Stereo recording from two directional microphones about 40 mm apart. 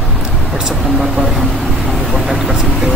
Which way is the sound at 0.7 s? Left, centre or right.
Centre.